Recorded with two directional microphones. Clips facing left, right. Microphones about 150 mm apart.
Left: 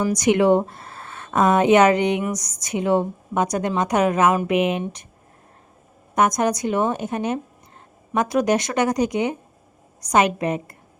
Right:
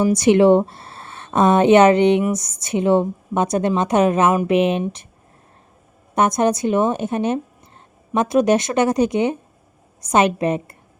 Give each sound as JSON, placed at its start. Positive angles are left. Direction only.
{"t": 0.0, "sound": "a woman's voice", "side_deg": -25}
{"t": 6.1, "sound": "a woman's voice", "side_deg": -30}